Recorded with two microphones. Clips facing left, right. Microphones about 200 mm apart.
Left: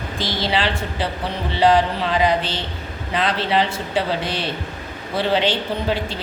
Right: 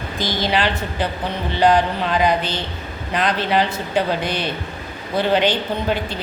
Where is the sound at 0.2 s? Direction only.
25° left (ahead or behind).